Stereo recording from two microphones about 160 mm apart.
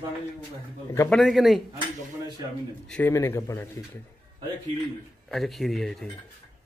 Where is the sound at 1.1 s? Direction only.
Centre (ahead or behind).